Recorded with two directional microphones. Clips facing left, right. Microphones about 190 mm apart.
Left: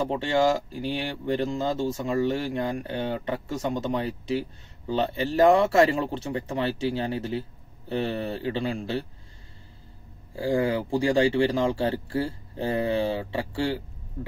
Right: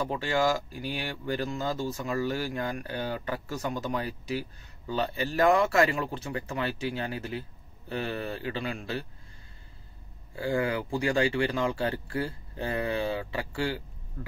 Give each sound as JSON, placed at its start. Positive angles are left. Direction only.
{"t": 0.0, "sound": "speech", "side_deg": 25}
{"t": 10.3, "sound": "speech", "side_deg": 30}